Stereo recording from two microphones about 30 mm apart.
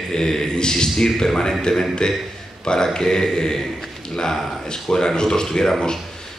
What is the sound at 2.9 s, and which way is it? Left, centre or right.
Speech, left.